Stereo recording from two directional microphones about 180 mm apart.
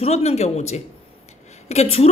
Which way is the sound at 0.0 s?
35° left (ahead or behind).